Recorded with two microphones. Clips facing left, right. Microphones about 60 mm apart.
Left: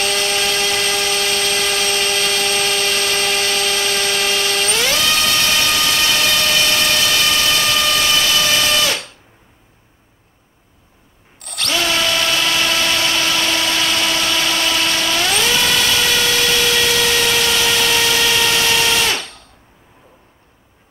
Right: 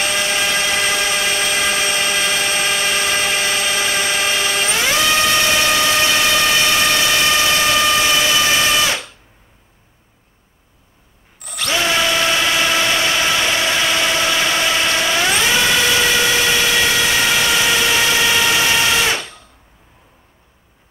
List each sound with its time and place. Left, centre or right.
0.0 s vehicle: right
11.4 s drill: centre
11.7 s a sound: right